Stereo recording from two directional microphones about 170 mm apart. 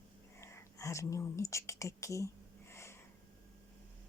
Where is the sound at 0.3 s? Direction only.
15° left (ahead or behind).